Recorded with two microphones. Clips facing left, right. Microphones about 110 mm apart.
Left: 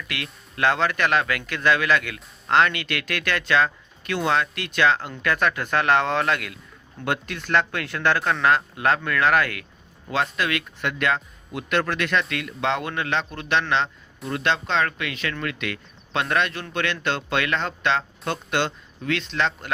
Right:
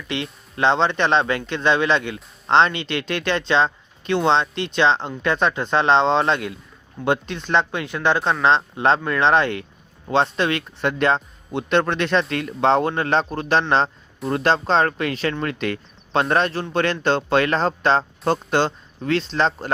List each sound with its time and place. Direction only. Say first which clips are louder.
0.1 s speech: right 11 dB; 25° right (ahead or behind)